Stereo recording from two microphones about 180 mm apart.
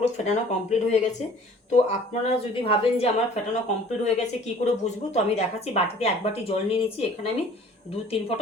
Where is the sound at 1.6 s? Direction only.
40° left (ahead or behind).